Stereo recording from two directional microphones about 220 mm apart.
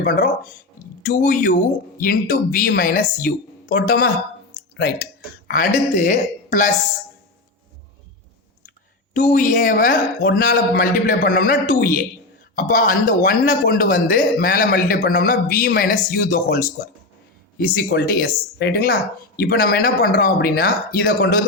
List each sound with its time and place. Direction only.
0.0 s a man's voice: 40° left (ahead or behind)
4.5 s a sound: 45° left (ahead or behind)
5.5 s a man's voice: 40° left (ahead or behind)
9.1 s a man's voice: 35° left (ahead or behind)